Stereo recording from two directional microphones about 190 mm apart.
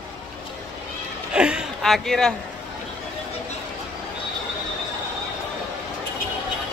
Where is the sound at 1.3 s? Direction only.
5° right (ahead or behind).